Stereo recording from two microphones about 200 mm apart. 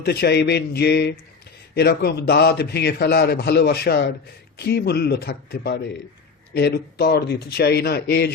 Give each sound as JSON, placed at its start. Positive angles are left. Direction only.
{"t": 0.0, "sound": "a man's voice", "side_deg": 50}